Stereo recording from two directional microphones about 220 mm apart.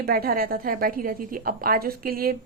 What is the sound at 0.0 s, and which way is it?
A woman's voice, 40° right (ahead or behind).